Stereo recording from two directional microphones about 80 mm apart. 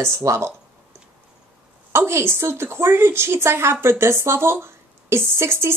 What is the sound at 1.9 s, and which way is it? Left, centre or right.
A woman's voice, right.